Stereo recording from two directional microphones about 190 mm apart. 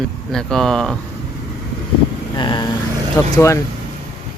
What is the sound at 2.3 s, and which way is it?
Vehicle, 20° left (ahead or behind).